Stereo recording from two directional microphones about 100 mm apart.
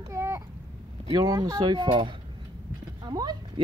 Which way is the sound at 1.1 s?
35° right (ahead or behind).